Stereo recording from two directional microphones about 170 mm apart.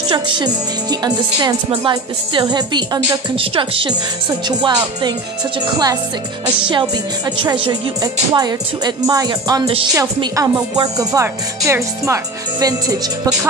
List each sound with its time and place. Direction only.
0.1 s speech: 25° right (ahead or behind)